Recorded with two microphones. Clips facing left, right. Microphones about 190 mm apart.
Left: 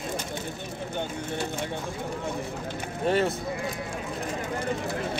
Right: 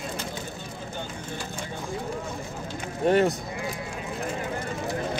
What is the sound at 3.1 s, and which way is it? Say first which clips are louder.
Speech: right 4 dB; 45° right (ahead or behind).